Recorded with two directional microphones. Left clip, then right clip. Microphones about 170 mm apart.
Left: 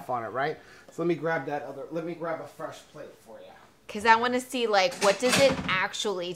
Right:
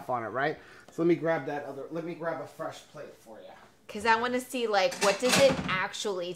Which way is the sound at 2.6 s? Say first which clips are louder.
Even; 20° right (ahead or behind).